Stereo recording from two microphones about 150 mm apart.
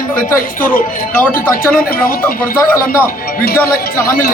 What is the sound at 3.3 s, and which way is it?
Speech, 80° left.